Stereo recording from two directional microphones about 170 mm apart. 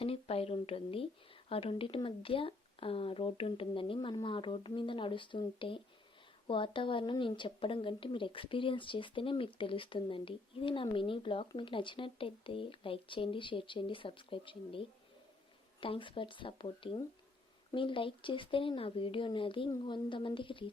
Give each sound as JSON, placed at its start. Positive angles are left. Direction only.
{"t": 0.0, "sound": "a woman's voice", "side_deg": 35}